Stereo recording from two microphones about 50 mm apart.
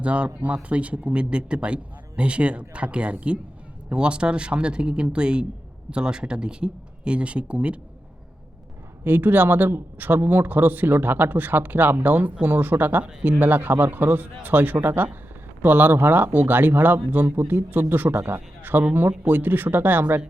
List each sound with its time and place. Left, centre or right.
0.0 s a man's voice: right
9.0 s speech: right